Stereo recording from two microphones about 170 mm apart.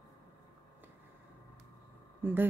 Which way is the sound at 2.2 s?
10° right (ahead or behind).